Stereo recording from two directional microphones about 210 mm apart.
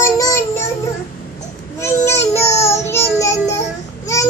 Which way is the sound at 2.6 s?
15° left (ahead or behind).